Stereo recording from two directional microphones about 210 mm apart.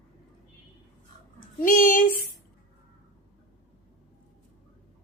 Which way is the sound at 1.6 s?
40° left (ahead or behind).